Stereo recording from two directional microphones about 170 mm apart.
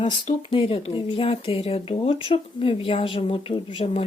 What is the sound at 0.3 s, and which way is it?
Speech, 30° left (ahead or behind).